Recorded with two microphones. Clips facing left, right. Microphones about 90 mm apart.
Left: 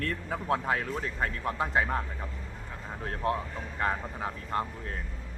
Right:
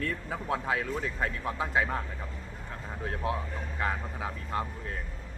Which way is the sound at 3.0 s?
45° left (ahead or behind).